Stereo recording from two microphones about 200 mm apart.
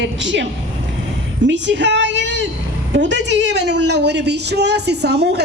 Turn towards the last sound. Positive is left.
turn(degrees=-55)  # may be behind; listen again after turning